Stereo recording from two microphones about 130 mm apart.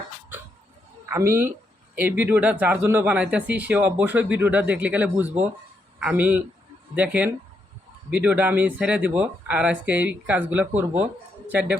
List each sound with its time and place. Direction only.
1.1 s speech: 20° right (ahead or behind)